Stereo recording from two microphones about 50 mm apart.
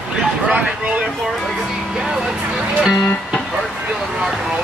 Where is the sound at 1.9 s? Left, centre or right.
Centre.